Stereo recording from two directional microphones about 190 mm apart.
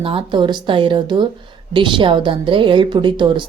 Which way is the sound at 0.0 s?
30° right (ahead or behind).